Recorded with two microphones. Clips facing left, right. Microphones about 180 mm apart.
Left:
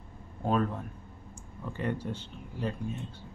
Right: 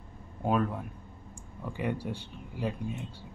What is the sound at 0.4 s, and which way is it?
Speech, 5° right (ahead or behind).